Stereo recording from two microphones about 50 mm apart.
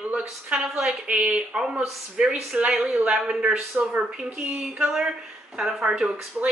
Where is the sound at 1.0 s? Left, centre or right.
Right.